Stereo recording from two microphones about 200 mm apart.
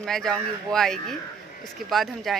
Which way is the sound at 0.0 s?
Centre (ahead or behind).